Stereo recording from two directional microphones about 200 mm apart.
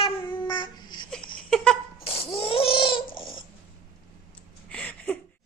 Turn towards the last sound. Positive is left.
turn(degrees=5)  # may be behind; listen again after turning